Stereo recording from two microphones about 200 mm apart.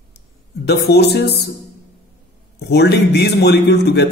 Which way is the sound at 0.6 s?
55° left (ahead or behind).